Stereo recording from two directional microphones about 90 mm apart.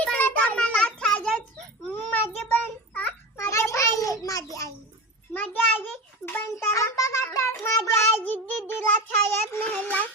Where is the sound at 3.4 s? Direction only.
30° left (ahead or behind).